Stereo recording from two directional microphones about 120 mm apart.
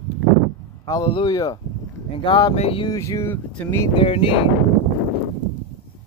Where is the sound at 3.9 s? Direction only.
45° left (ahead or behind).